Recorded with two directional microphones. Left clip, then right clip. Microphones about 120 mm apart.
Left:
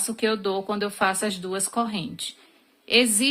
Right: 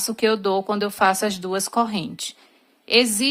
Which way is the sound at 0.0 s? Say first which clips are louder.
Right 4 dB; 45° right (ahead or behind).